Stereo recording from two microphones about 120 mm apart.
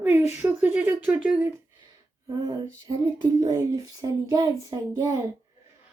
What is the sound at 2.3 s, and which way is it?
Female singing, 30° right (ahead or behind).